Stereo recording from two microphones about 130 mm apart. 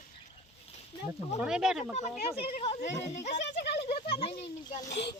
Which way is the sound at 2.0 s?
55° left (ahead or behind).